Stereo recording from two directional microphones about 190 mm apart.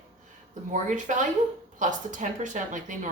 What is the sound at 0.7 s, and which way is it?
A woman's voice, 40° right (ahead or behind).